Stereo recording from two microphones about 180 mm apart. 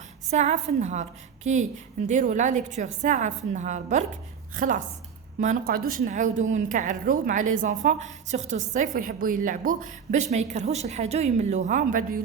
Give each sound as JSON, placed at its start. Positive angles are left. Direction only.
{"t": 0.3, "sound": "a woman's voice", "side_deg": -40}